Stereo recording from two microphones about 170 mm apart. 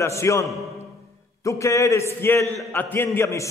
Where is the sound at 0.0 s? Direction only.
15° left (ahead or behind).